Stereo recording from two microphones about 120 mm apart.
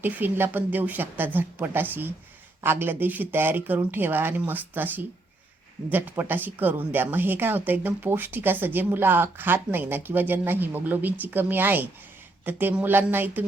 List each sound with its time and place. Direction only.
0.0 s speech: 15° right (ahead or behind)